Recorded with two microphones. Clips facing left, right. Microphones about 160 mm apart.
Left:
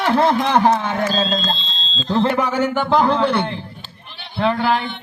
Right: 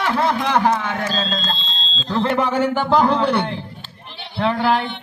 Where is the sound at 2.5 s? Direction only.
Centre (ahead or behind).